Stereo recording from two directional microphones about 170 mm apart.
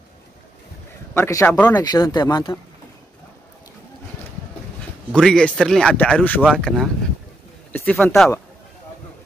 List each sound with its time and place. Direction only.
1.1 s speech: 15° left (ahead or behind)
1.7 s speech: 20° left (ahead or behind)
5.1 s speech: 5° left (ahead or behind)